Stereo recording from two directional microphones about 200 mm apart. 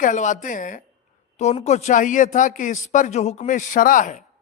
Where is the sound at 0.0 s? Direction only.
40° left (ahead or behind).